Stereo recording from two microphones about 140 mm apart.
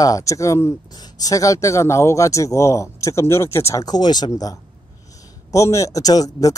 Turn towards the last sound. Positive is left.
turn(degrees=25)  # may be behind; listen again after turning